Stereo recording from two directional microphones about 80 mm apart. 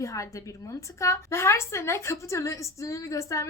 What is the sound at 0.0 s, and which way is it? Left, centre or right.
A woman's voice, left.